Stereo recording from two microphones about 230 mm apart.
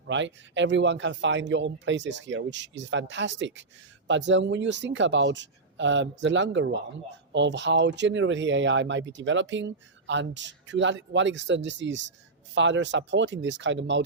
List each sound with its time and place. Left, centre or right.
0.1 s speech: right